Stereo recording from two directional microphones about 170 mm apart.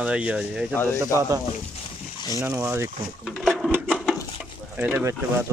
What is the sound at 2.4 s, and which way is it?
Speech, 10° right (ahead or behind).